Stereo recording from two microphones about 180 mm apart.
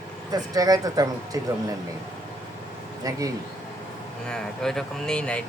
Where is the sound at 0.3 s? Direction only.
20° right (ahead or behind).